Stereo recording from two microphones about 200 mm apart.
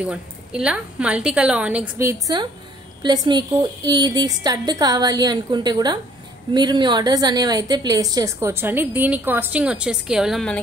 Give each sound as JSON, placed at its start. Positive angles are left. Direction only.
{"t": 0.0, "sound": "a woman's voice", "side_deg": -5}